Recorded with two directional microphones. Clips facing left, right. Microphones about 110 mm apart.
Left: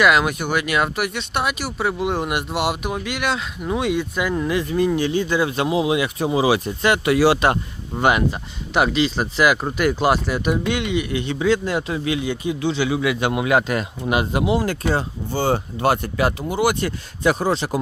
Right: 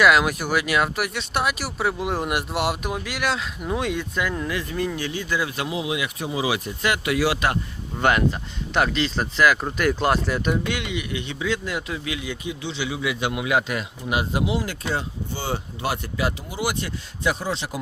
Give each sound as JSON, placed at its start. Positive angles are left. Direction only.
{"t": 0.0, "sound": "speech", "side_deg": 0}
{"t": 4.2, "sound": "speech", "side_deg": 15}
{"t": 8.0, "sound": "speech", "side_deg": 15}
{"t": 10.7, "sound": "speech", "side_deg": 30}
{"t": 12.6, "sound": "speech", "side_deg": 50}
{"t": 14.2, "sound": "speech", "side_deg": 55}